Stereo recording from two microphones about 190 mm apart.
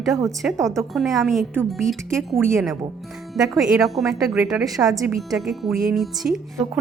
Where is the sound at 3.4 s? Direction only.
5° right (ahead or behind).